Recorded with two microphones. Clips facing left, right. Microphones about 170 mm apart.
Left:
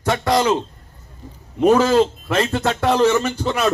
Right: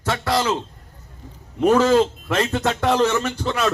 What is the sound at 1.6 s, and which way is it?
Speech, 10° left (ahead or behind).